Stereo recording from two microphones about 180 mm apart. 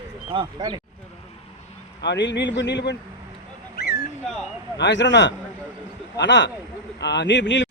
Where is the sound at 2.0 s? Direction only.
75° left (ahead or behind).